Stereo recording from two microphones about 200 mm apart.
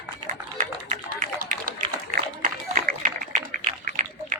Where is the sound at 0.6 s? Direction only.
40° right (ahead or behind).